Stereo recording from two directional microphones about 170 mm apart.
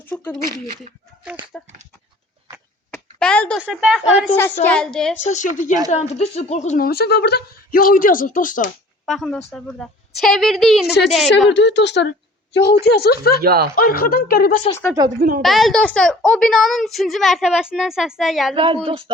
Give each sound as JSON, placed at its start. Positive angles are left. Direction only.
{"t": 0.0, "sound": "speech", "side_deg": 10}
{"t": 0.4, "sound": "speech", "side_deg": -45}
{"t": 1.5, "sound": "a child's voice", "side_deg": 5}
{"t": 2.9, "sound": "a sound", "side_deg": 5}
{"t": 3.6, "sound": "a child's voice", "side_deg": -5}
{"t": 5.3, "sound": "a woman's voice", "side_deg": 45}
{"t": 6.8, "sound": "speech", "side_deg": 70}
{"t": 9.0, "sound": "a child's voice", "side_deg": 0}
{"t": 11.4, "sound": "speech", "side_deg": 90}
{"t": 12.5, "sound": "speech", "side_deg": 70}
{"t": 13.4, "sound": "speech", "side_deg": -65}
{"t": 13.7, "sound": "speech", "side_deg": 60}
{"t": 15.4, "sound": "a child's voice", "side_deg": 0}
{"t": 18.5, "sound": "speech", "side_deg": -30}